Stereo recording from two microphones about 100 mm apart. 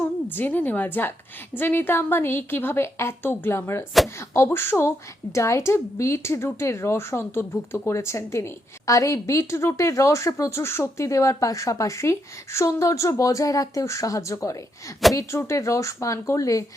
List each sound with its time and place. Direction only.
0.3 s a woman's voice: 20° left (ahead or behind); by 16.6 s 35° left (ahead or behind)